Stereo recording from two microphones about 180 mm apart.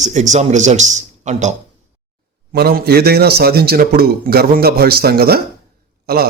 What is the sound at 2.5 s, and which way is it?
A man's voice, 60° right (ahead or behind).